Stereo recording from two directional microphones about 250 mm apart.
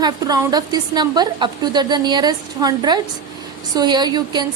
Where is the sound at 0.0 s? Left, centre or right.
Centre.